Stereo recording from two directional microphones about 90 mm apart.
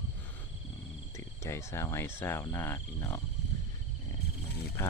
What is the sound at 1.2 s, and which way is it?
Cricket, 35° left (ahead or behind).